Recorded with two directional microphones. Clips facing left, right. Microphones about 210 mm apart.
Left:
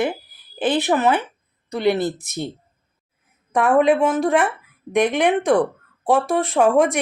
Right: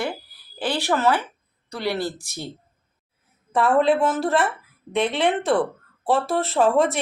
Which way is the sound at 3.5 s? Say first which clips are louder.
Left 3 dB; 15° left (ahead or behind).